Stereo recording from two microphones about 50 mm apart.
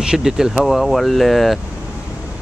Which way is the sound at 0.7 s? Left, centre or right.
Centre.